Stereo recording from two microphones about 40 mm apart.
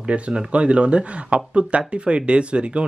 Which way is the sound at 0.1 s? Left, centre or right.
Right.